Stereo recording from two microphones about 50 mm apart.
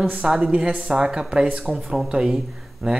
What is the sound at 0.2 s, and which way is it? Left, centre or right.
Speech, centre.